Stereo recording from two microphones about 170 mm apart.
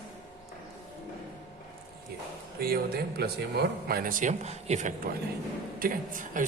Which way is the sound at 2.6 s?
60° right (ahead or behind).